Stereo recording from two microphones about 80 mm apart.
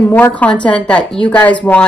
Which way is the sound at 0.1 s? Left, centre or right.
Centre.